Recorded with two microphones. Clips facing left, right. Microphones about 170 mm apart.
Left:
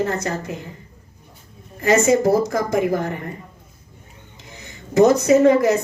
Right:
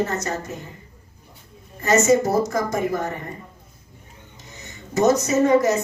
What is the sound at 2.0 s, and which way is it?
A woman's voice, 55° left (ahead or behind).